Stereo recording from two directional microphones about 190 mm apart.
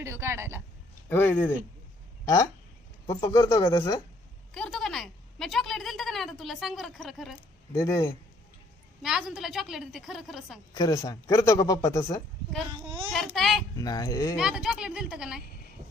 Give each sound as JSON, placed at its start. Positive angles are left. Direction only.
{"t": 0.0, "sound": "speech", "side_deg": -15}
{"t": 1.1, "sound": "speech", "side_deg": 10}
{"t": 4.5, "sound": "a sound", "side_deg": 0}
{"t": 7.7, "sound": "speech", "side_deg": 15}
{"t": 9.0, "sound": "a woman's voice", "side_deg": -5}
{"t": 10.8, "sound": "speech", "side_deg": 20}
{"t": 13.1, "sound": "a woman's voice", "side_deg": 0}
{"t": 13.7, "sound": "speech", "side_deg": 20}
{"t": 14.3, "sound": "a woman's voice", "side_deg": -5}